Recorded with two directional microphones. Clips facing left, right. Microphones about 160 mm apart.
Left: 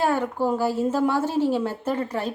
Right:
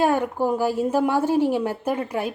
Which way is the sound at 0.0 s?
15° right (ahead or behind).